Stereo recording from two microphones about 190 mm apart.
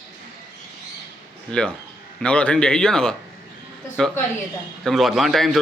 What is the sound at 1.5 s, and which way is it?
A man's voice, 5° left (ahead or behind).